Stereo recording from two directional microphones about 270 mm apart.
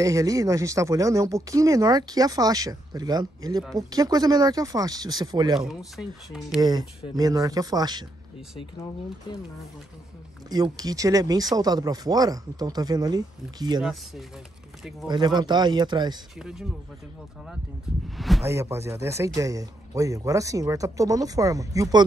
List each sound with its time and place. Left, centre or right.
0.0 s speech: centre
5.6 s speech: centre
7.2 s speech: centre
10.5 s speech: centre
13.7 s speech: centre
15.0 s speech: centre
16.3 s speech: centre
18.1 s speech: centre
18.4 s speech: centre